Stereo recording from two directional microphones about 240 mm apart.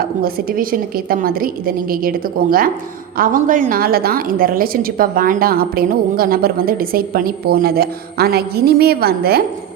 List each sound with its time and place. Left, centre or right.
0.0 s a woman's voice: right